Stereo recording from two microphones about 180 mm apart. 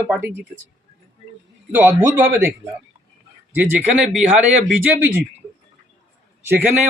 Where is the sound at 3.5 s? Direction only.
5° right (ahead or behind).